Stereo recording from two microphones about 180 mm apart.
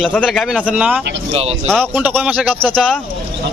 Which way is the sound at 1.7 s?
5° left (ahead or behind).